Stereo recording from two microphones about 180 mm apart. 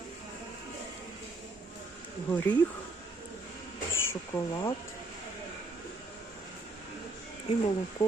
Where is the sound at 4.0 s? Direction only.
15° left (ahead or behind).